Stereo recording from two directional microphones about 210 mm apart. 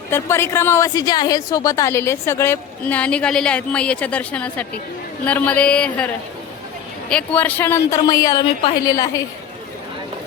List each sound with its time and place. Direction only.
0.1 s a woman's voice: 10° left (ahead or behind)
7.1 s a woman's voice: 5° left (ahead or behind)